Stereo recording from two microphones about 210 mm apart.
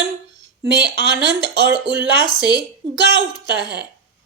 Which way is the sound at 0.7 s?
55° right (ahead or behind).